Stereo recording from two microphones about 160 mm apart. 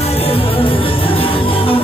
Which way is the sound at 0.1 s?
35° left (ahead or behind).